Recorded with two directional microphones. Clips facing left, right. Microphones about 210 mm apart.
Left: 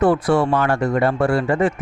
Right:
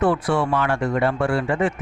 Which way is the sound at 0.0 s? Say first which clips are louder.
Left 4 dB; 40° left (ahead or behind).